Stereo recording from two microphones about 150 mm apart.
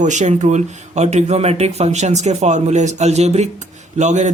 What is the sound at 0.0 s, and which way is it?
Speech, 55° right (ahead or behind).